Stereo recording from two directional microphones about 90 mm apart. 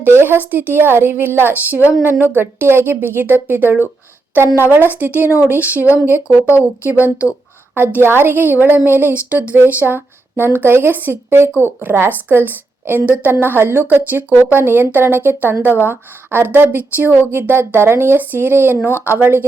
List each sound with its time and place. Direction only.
0.0 s a woman's voice: 25° right (ahead or behind)
6.4 s speech: 30° left (ahead or behind)
7.8 s a woman's voice: 25° right (ahead or behind)